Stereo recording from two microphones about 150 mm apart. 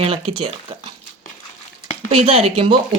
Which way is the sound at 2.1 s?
40° right (ahead or behind).